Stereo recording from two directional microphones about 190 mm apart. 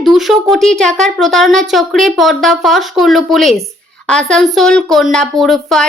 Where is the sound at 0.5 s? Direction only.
Centre (ahead or behind).